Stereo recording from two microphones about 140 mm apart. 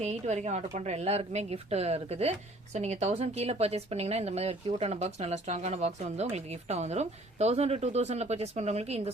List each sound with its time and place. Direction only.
0.0 s speech: 55° right (ahead or behind)